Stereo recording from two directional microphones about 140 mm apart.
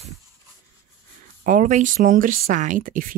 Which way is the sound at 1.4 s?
70° right (ahead or behind).